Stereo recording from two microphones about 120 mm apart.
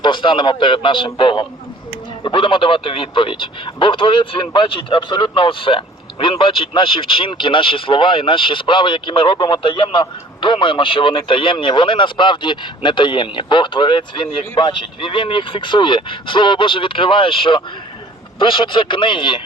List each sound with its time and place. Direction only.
0.0 s speech: 40° left (ahead or behind)